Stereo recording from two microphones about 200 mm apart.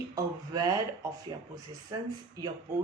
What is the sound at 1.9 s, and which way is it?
Speech, 20° right (ahead or behind).